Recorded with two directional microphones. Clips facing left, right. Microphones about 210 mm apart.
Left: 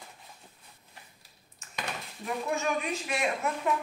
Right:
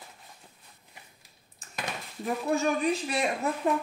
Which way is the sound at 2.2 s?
35° right (ahead or behind).